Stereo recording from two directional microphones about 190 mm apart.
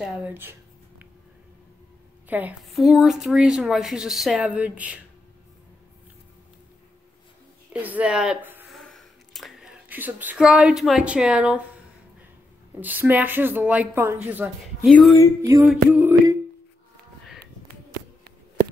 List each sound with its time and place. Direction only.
0.0 s a sound: 5° right (ahead or behind)
2.2 s a woman's voice: 10° right (ahead or behind)
7.7 s speech: 10° right (ahead or behind)
8.8 s speech: centre (ahead or behind)
12.8 s a woman's voice: 10° right (ahead or behind)
14.9 s a woman's voice: 5° left (ahead or behind)
15.4 s a woman's voice: 15° right (ahead or behind)